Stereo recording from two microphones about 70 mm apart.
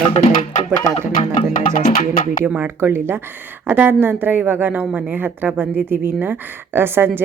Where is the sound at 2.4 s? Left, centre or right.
Right.